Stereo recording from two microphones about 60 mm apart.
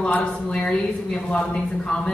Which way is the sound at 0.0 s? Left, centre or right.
Centre.